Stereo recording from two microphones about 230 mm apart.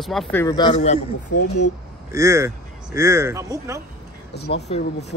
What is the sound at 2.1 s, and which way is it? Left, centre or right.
Speech, centre.